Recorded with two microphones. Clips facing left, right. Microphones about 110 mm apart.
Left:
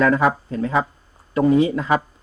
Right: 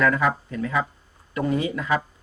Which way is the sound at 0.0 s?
25° left (ahead or behind).